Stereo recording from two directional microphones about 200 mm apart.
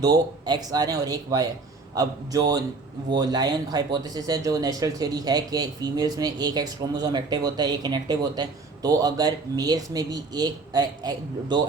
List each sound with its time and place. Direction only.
0.0 s speech: 20° right (ahead or behind)